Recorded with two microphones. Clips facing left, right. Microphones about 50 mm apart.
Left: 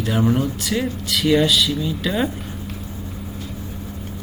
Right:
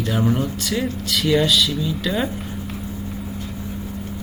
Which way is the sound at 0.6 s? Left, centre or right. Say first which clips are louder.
Even; centre.